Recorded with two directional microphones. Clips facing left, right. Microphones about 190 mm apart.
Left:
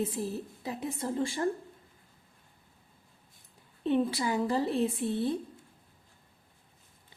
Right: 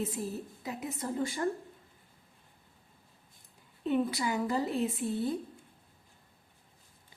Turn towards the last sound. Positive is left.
turn(degrees=30)  # may be behind; listen again after turning